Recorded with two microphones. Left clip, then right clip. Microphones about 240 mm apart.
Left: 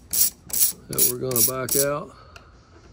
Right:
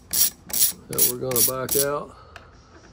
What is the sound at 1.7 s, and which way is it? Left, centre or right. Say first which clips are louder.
Speech: even; centre.